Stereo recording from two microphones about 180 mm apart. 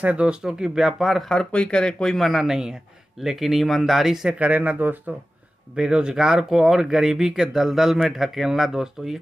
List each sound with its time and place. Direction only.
0.0 s speech: 5° right (ahead or behind)